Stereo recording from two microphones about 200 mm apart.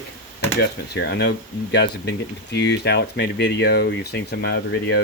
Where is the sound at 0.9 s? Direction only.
60° left (ahead or behind).